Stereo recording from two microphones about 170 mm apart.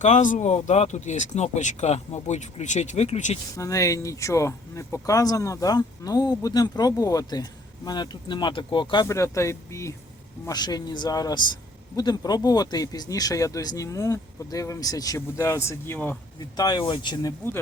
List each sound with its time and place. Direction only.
0.0 s speech: 45° left (ahead or behind)
3.6 s speech: 20° left (ahead or behind)
9.0 s speech: 15° left (ahead or behind)
16.6 s speech: 25° left (ahead or behind)